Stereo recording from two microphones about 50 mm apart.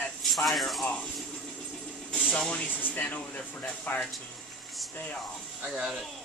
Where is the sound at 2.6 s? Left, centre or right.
Left.